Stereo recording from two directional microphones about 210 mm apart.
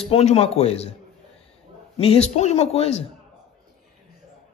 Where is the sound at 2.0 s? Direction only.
30° left (ahead or behind).